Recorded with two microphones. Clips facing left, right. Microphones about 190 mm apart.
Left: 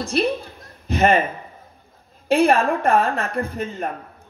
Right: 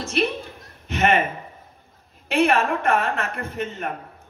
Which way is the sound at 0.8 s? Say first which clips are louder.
Left 3 dB; 35° left (ahead or behind).